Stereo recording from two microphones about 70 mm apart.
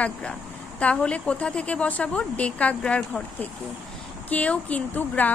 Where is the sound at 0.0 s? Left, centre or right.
Centre.